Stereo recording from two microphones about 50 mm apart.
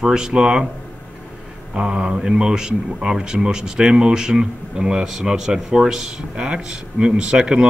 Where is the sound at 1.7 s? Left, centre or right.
Centre.